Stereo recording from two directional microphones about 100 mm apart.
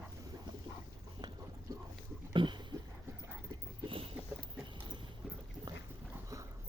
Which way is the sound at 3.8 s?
65° right (ahead or behind).